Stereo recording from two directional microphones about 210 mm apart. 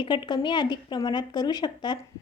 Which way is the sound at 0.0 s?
20° left (ahead or behind).